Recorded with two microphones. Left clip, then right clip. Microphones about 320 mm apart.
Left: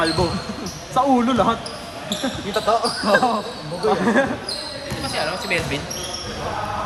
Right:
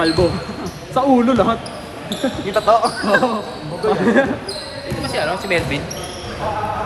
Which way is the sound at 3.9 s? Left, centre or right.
Left.